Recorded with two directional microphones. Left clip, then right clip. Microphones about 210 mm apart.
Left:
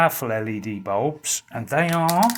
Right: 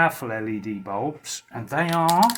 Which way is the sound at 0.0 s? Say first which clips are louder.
Left 2 dB; 50° left (ahead or behind).